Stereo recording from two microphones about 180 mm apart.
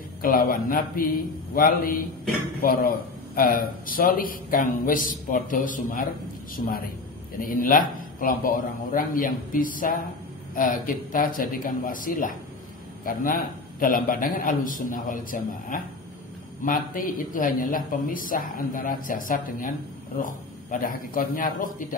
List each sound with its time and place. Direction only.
0.2 s speech: 50° left (ahead or behind)
3.3 s a man's voice: 50° left (ahead or behind)